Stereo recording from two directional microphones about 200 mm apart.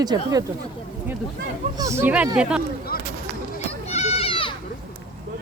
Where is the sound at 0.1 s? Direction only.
20° right (ahead or behind).